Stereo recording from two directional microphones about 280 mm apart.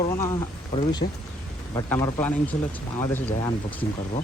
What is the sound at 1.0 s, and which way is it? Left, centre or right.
Speech, left.